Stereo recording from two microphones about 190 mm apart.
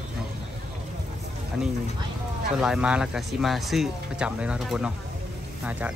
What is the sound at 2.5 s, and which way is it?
Speech, 5° right (ahead or behind).